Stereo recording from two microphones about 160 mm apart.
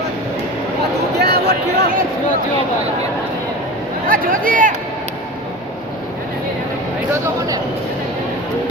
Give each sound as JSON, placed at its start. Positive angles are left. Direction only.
{"t": 1.2, "sound": "speech", "side_deg": -90}
{"t": 4.0, "sound": "speech", "side_deg": -60}